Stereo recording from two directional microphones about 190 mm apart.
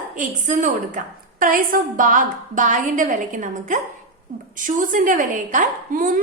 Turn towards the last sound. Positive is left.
turn(degrees=-45)  # may be behind; listen again after turning